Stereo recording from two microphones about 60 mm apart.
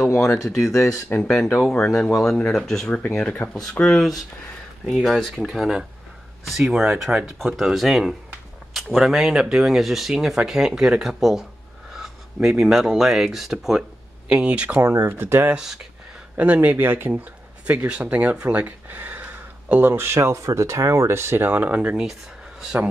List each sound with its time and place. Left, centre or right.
0.4 s speech: centre
1.0 s speech: left
2.0 s speech: centre
3.2 s speech: left
3.8 s speech: left
4.8 s speech: centre
14.3 s speech: centre
14.8 s speech: right
15.5 s speech: centre
16.3 s speech: right
20.2 s speech: right